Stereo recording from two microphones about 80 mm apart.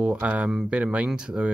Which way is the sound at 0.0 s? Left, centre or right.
Centre.